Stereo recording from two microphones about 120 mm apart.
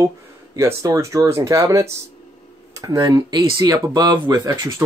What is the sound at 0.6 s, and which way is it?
Speech, 25° right (ahead or behind).